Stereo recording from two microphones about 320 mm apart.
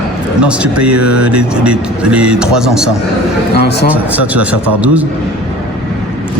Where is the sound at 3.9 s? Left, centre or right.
Centre.